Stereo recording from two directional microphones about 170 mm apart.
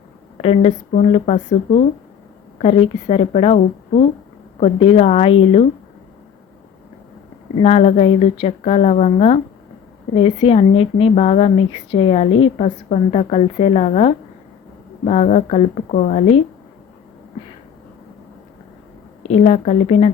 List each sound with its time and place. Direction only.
0.4 s a woman's voice: 40° left (ahead or behind)
7.6 s a woman's voice: 40° left (ahead or behind)
19.3 s a woman's voice: 40° left (ahead or behind)